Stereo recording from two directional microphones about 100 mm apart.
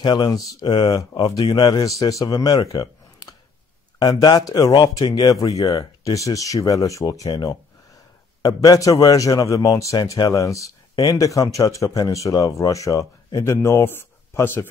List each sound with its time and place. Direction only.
0.0 s a man's voice: 50° left (ahead or behind); by 14.7 s 20° left (ahead or behind)